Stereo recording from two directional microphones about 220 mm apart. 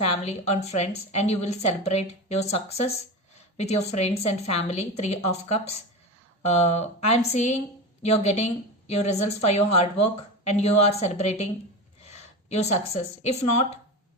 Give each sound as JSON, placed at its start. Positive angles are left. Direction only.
{"t": 0.2, "sound": "a woman's voice", "side_deg": 30}